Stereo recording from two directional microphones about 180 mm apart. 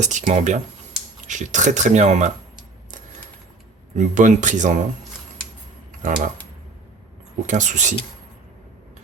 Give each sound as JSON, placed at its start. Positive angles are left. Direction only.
{"t": 0.0, "sound": "speech", "side_deg": -40}
{"t": 3.9, "sound": "speech", "side_deg": -45}
{"t": 6.0, "sound": "speech", "side_deg": -45}
{"t": 7.4, "sound": "speech", "side_deg": -45}